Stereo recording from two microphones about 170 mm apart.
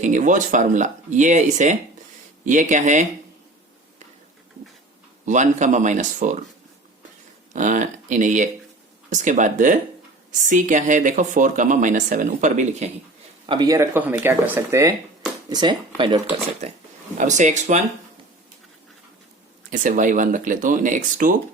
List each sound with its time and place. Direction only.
0.0 s speech: 45° right (ahead or behind)
5.2 s speech: 45° right (ahead or behind)
7.5 s speech: 45° right (ahead or behind)
13.5 s speech: 20° right (ahead or behind)
17.2 s speech: 45° right (ahead or behind)
19.7 s speech: 50° right (ahead or behind)